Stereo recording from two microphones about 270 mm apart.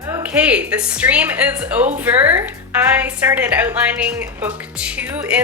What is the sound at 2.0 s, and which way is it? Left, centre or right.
A woman's voice, centre.